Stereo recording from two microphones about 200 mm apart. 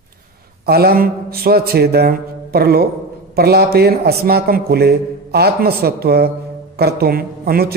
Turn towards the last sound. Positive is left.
turn(degrees=-50)  # may be behind; listen again after turning